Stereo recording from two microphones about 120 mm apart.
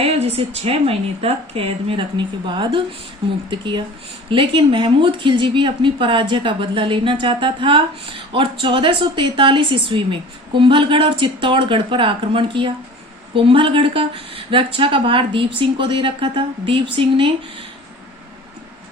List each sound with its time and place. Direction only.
0.0 s a woman's voice: 60° right (ahead or behind)